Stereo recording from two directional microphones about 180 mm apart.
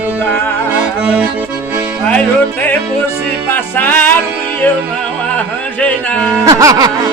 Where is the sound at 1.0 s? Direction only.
10° right (ahead or behind).